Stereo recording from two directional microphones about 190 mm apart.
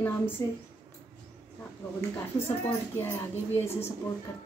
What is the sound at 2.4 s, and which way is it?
Speech, 10° left (ahead or behind).